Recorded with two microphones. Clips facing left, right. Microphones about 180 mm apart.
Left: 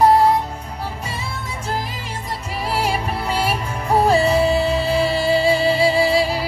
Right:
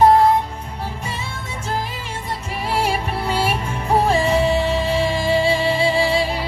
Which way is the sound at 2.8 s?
35° left (ahead or behind).